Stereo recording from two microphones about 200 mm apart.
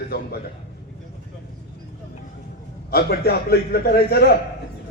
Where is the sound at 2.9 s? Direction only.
50° left (ahead or behind).